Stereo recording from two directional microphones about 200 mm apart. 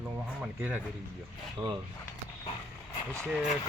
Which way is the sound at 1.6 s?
25° right (ahead or behind).